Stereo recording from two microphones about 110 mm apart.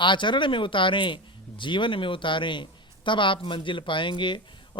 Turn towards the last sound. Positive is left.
turn(degrees=45)  # may be behind; listen again after turning